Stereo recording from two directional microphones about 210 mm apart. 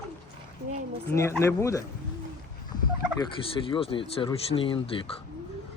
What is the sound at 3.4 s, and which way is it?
Speech, 25° left (ahead or behind).